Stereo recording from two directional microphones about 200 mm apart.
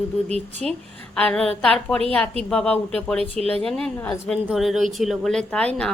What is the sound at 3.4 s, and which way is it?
Speech, 30° right (ahead or behind).